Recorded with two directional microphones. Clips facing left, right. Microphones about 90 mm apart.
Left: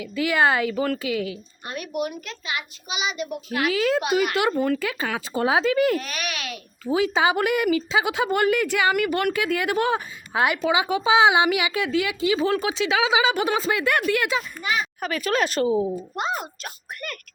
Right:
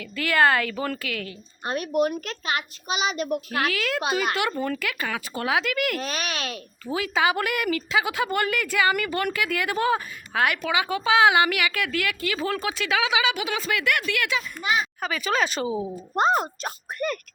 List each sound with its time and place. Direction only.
0.0 s speech: 15° left (ahead or behind)
1.6 s a woman's voice: 40° right (ahead or behind)
3.7 s a woman's voice: 20° left (ahead or behind)
4.5 s speech: centre (ahead or behind)
4.8 s a woman's voice: 25° left (ahead or behind)
6.0 s a child's voice: 30° right (ahead or behind)
6.8 s a woman's voice: 20° left (ahead or behind)
15.0 s speech: centre (ahead or behind)
16.1 s a child's voice: 40° right (ahead or behind)